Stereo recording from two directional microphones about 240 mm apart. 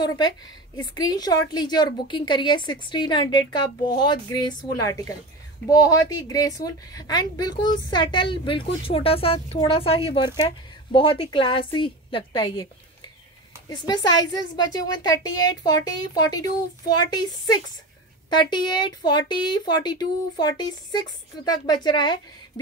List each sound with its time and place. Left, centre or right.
0.7 s a woman's voice: centre
13.7 s a woman's voice: centre
18.3 s a woman's voice: centre